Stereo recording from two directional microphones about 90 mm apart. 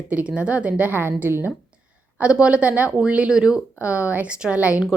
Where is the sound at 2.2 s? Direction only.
10° right (ahead or behind).